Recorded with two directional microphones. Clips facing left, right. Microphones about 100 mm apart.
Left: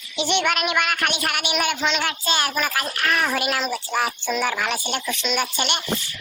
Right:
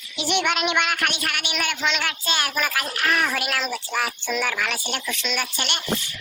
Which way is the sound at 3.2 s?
5° left (ahead or behind).